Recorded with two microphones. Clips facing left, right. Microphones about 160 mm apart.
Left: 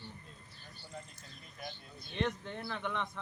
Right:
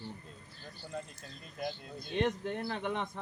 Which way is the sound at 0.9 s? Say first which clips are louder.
Right 7 dB; 70° right (ahead or behind).